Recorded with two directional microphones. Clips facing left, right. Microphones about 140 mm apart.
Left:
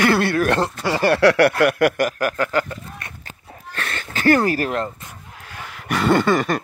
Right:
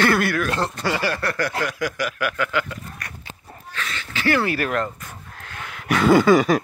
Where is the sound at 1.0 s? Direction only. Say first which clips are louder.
Left 10 dB; 70° left (ahead or behind).